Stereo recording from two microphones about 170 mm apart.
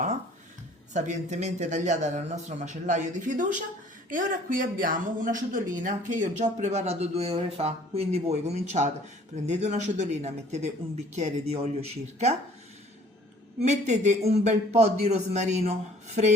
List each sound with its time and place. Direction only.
0.9 s a man's voice: 45° right (ahead or behind)
13.6 s speech: 45° right (ahead or behind)